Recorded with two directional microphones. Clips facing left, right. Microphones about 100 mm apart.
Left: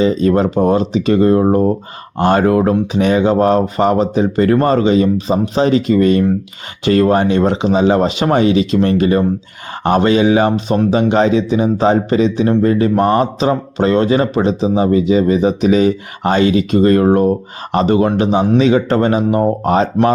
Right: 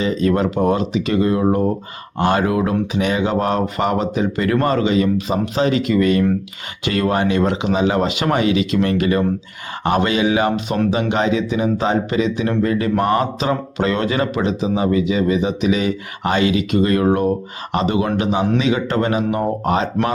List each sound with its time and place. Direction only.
0.0 s speech: 30° left (ahead or behind)